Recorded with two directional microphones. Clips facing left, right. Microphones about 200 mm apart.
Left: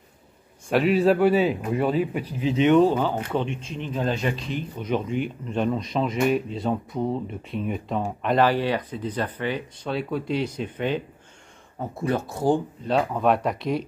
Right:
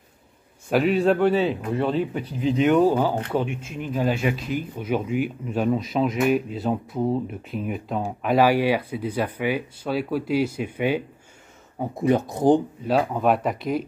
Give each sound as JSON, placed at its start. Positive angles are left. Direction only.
{"t": 0.7, "sound": "a man's voice", "side_deg": 0}
{"t": 12.8, "sound": "a man's voice", "side_deg": -5}